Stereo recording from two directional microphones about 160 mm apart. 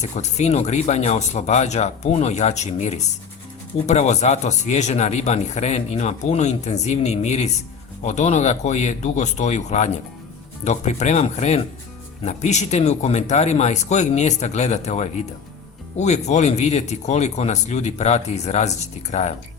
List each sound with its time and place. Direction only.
0.0 s speech: 45° left (ahead or behind)